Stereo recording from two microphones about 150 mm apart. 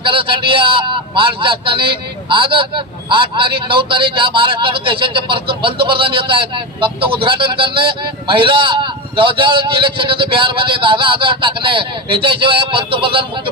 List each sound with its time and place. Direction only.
0.0 s a man's voice: 35° right (ahead or behind)